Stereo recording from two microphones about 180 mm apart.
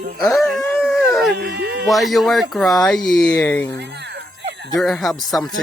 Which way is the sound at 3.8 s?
70° right (ahead or behind).